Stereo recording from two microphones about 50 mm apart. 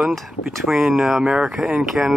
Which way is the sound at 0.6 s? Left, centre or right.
Centre.